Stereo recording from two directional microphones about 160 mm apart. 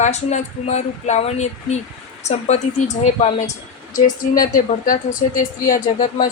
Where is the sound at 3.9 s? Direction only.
55° left (ahead or behind).